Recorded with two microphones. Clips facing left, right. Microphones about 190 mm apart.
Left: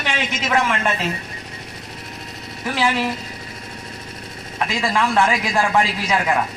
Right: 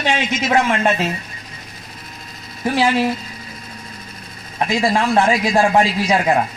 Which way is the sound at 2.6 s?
40° right (ahead or behind).